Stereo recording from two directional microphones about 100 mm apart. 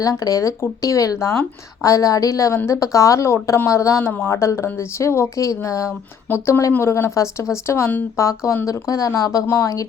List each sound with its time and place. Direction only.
0.0 s speech: 35° left (ahead or behind)